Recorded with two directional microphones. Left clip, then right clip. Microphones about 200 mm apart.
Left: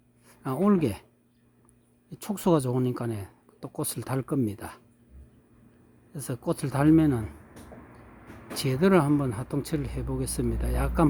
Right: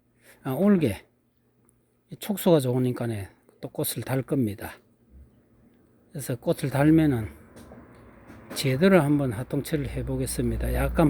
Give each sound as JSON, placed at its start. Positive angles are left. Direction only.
{"t": 0.3, "sound": "speech", "side_deg": -20}
{"t": 2.0, "sound": "speech", "side_deg": -15}
{"t": 6.1, "sound": "speech", "side_deg": -20}
{"t": 8.4, "sound": "speech", "side_deg": -15}